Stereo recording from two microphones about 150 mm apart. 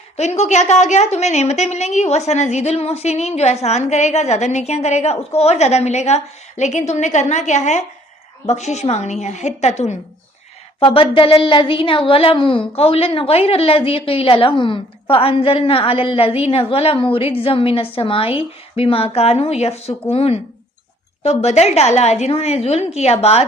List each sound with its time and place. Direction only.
0.2 s a woman's voice: 50° left (ahead or behind)
10.8 s a woman's voice: 35° left (ahead or behind)